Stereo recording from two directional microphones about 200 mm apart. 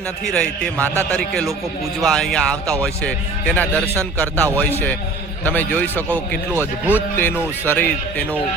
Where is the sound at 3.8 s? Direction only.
10° right (ahead or behind).